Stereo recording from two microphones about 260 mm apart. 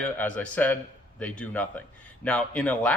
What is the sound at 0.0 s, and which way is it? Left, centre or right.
Speech, centre.